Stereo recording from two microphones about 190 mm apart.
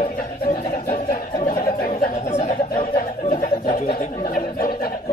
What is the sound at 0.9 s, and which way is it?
Bird, 45° left (ahead or behind).